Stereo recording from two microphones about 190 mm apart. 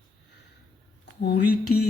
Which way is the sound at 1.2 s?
60° left (ahead or behind).